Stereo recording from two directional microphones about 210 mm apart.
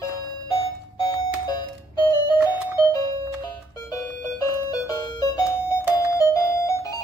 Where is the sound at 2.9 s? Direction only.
15° left (ahead or behind).